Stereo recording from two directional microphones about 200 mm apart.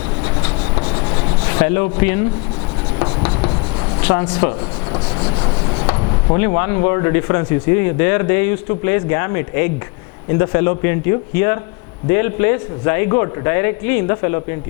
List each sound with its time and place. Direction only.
0.4 s rub: 20° left (ahead or behind)
3.0 s writing: 20° left (ahead or behind)
4.0 s speech: 10° left (ahead or behind)
5.2 s rub: 25° left (ahead or behind)
6.3 s speech: 15° left (ahead or behind)